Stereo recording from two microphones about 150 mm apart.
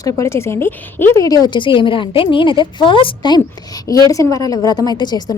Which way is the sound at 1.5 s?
35° left (ahead or behind).